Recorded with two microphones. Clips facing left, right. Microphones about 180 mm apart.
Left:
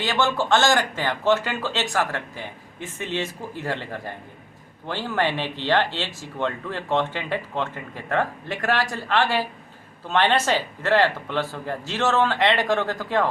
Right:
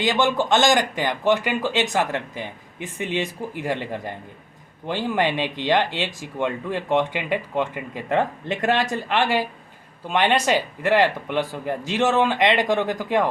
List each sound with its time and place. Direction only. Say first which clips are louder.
0.0 s speech: right 3 dB; 15° right (ahead or behind)